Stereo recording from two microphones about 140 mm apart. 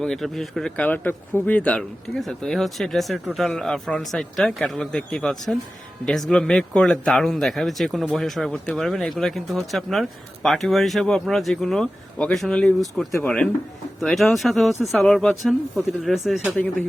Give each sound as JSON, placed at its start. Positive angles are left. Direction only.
{"t": 0.0, "sound": "speech", "side_deg": 5}